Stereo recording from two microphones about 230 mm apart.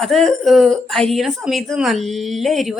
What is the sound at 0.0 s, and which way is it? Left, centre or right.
Speech, centre.